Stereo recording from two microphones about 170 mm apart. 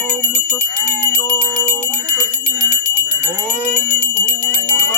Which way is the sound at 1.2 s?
15° left (ahead or behind).